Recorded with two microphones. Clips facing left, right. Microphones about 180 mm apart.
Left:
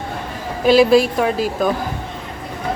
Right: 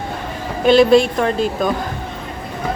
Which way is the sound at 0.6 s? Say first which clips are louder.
Right 1 dB; 5° left (ahead or behind).